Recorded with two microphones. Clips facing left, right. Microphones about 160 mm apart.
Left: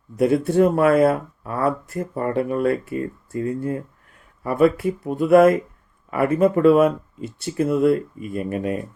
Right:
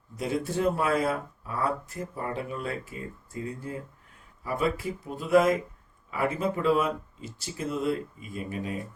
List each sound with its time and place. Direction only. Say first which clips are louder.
0.2 s speech: left 11 dB; 60° left (ahead or behind)